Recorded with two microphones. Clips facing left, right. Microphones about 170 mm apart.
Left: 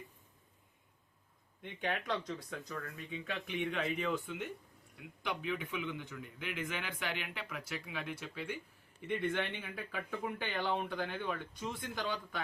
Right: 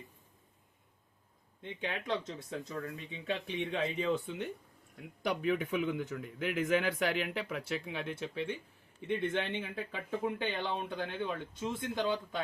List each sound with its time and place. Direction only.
2.0 s speech: 25° right (ahead or behind)
5.2 s speech: 45° right (ahead or behind); by 12.4 s 25° right (ahead or behind)